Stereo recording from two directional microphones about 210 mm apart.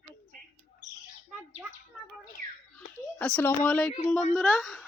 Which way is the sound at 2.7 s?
5° left (ahead or behind).